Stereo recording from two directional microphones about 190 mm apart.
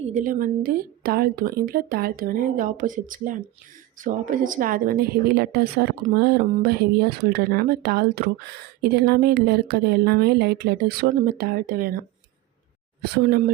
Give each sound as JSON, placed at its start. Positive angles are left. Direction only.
{"t": 0.0, "sound": "a woman's voice", "side_deg": -40}